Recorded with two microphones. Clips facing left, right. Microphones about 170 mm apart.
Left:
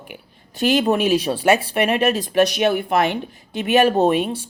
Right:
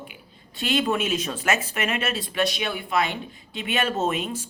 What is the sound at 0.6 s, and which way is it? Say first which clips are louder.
Speech: left 6 dB; 35° left (ahead or behind).